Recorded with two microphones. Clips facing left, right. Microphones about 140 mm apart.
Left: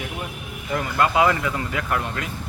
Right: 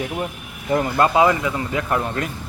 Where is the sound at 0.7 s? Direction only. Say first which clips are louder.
Right 4 dB; 35° right (ahead or behind).